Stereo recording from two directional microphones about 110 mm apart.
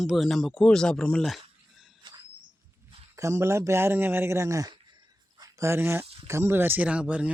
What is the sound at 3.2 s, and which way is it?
Speech, 25° right (ahead or behind).